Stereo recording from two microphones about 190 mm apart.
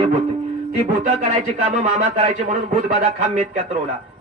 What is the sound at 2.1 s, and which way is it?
Speech, 40° right (ahead or behind).